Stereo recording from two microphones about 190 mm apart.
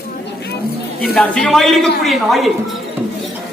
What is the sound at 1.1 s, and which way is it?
A man's voice, 5° left (ahead or behind).